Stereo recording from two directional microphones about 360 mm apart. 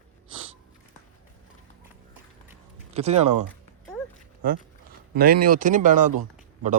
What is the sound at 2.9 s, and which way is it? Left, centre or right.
Speech, centre.